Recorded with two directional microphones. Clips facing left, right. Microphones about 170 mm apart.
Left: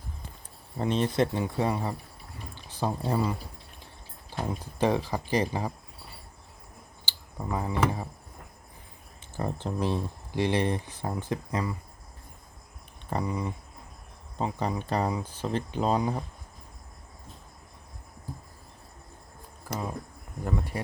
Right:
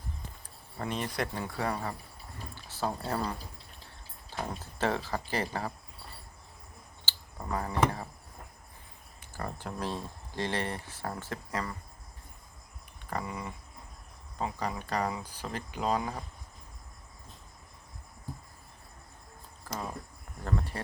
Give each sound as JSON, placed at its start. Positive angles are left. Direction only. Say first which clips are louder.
{"t": 0.8, "sound": "speech", "louder": "left 8 dB", "side_deg": 25}
{"t": 7.0, "sound": "clicking", "louder": "left 4 dB", "side_deg": 15}
{"t": 7.4, "sound": "speech", "louder": "left 2 dB", "side_deg": 10}
{"t": 9.3, "sound": "speech", "louder": "left 6 dB", "side_deg": 25}
{"t": 13.1, "sound": "speech", "louder": "left 6 dB", "side_deg": 20}
{"t": 19.7, "sound": "insect", "louder": "left 4 dB", "side_deg": 10}